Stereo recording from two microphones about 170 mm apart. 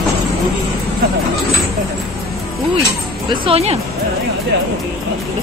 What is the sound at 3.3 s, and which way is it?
Speech, 35° right (ahead or behind).